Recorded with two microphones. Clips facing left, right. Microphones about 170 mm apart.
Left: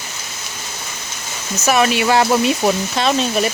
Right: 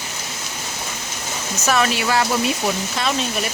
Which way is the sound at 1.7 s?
15° left (ahead or behind).